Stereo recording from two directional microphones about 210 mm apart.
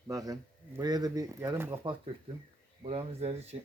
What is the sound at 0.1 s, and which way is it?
Speech, 15° right (ahead or behind).